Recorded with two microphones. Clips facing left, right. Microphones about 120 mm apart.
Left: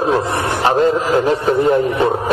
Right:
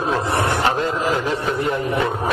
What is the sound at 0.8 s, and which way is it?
Speech, 40° left (ahead or behind).